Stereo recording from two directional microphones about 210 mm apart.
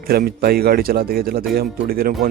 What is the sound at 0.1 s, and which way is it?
A man's voice, 45° right (ahead or behind).